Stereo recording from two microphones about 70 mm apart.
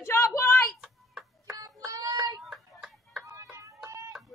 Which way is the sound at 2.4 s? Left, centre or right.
Centre.